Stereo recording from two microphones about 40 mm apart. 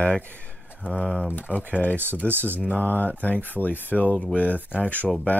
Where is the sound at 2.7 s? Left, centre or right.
Left.